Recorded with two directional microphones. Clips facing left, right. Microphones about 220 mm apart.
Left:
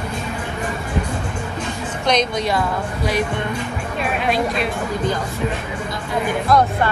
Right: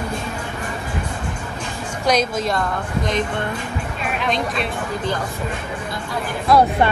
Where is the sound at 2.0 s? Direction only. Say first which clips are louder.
Even; 5° right (ahead or behind).